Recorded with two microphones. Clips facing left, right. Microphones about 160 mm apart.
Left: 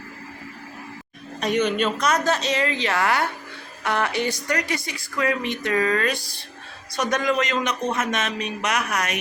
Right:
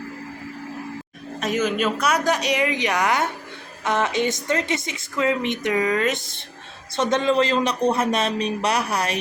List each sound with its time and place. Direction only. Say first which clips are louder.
1.4 s a woman's voice: left 1 dB; 5° right (ahead or behind); by 9.1 s 30° right (ahead or behind)